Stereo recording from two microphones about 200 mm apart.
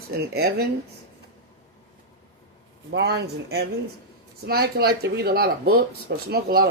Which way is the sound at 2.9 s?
55° right (ahead or behind).